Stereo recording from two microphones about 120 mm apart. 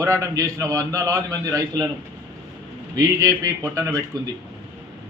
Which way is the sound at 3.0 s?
30° right (ahead or behind).